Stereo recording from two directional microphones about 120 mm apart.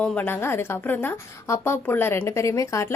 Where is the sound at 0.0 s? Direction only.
10° left (ahead or behind).